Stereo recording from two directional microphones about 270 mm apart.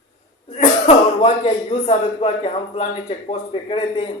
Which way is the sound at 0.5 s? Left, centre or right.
Left.